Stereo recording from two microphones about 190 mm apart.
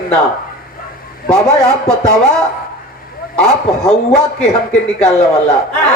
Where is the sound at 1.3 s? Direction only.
5° left (ahead or behind).